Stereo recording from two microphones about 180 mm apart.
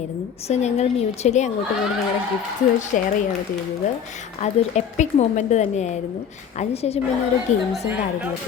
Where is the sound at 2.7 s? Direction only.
40° left (ahead or behind).